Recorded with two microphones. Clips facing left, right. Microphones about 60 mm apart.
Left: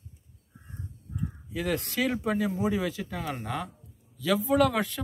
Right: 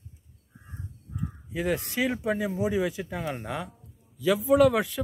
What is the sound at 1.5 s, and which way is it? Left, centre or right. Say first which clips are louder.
A man's voice: right 2 dB; right.